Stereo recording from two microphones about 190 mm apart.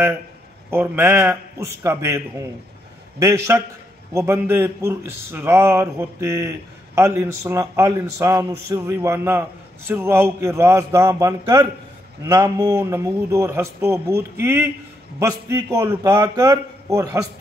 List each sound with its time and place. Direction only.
0.7 s a man's voice: 10° right (ahead or behind)